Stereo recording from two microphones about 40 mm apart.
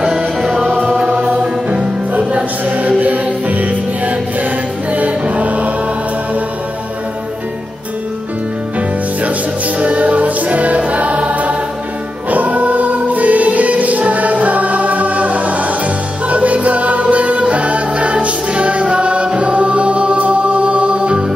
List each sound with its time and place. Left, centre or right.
0.4 s music: centre
1.0 s choir: right
1.4 s music: right
9.8 s music: right